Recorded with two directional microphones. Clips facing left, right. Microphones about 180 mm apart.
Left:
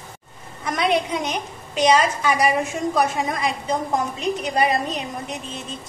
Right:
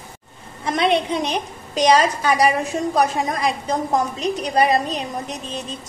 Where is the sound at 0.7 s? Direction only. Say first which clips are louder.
Right 2 dB; 30° right (ahead or behind).